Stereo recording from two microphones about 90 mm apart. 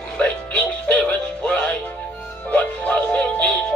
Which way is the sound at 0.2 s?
15° left (ahead or behind).